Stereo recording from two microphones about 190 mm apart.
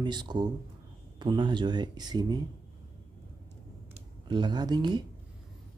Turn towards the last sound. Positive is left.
turn(degrees=-20)  # may be behind; listen again after turning